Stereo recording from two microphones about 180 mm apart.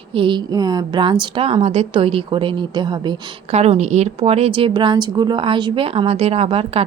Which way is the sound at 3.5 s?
35° right (ahead or behind).